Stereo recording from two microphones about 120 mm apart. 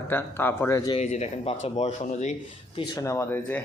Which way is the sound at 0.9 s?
70° left (ahead or behind).